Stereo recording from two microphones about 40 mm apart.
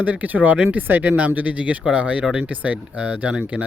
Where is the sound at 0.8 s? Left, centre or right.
Right.